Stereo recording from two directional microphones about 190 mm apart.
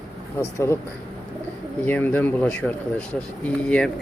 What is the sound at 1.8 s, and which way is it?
Speech, 10° left (ahead or behind).